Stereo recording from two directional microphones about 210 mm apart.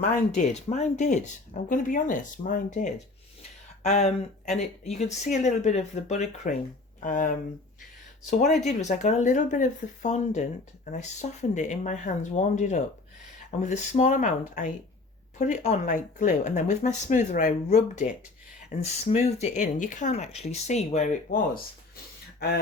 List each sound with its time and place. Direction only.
0.0 s speech: 35° left (ahead or behind)
8.6 s speech: 35° left (ahead or behind)